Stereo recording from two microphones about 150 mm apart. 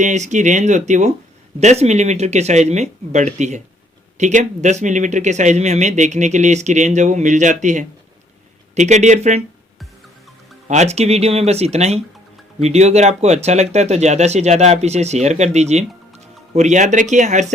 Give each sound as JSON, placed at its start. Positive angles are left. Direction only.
{"t": 0.0, "sound": "speech", "side_deg": -55}
{"t": 10.7, "sound": "speech", "side_deg": -50}